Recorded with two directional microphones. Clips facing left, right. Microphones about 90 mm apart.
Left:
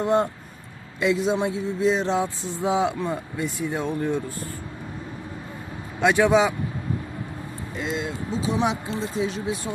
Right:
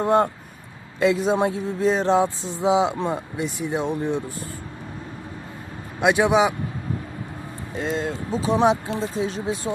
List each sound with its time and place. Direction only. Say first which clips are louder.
0.9 s speech: right 3 dB; 35° right (ahead or behind); by 4.2 s 20° right (ahead or behind)
6.0 s a man's voice: even; 15° right (ahead or behind)
7.8 s speech: right 3 dB; 45° right (ahead or behind)